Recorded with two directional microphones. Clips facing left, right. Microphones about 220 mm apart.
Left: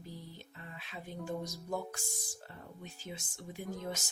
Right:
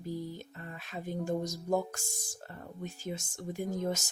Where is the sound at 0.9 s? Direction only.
45° right (ahead or behind).